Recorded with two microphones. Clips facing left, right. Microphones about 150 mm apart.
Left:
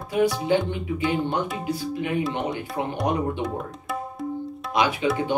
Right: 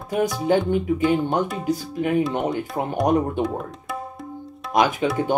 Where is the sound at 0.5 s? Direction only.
45° right (ahead or behind).